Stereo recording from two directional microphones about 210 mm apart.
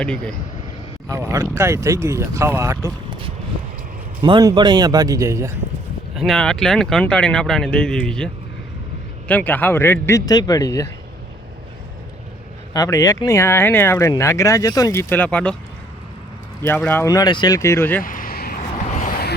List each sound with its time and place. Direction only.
0.0 s speech: 5° left (ahead or behind)
1.3 s speech: 15° right (ahead or behind)
4.2 s a man's voice: 20° right (ahead or behind)
6.1 s speech: centre (ahead or behind); by 10.8 s 15° left (ahead or behind)
12.7 s speech: 15° left (ahead or behind)
16.6 s speech: 10° left (ahead or behind)
18.0 s vehicle: 40° left (ahead or behind)
18.9 s a sound: 45° left (ahead or behind)